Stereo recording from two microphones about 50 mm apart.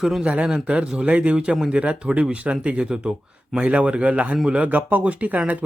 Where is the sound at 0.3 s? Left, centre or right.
Centre.